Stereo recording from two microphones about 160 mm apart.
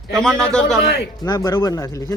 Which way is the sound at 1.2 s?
25° left (ahead or behind).